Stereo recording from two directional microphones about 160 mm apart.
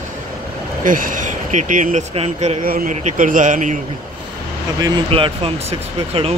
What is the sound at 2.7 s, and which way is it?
Speech, 55° right (ahead or behind).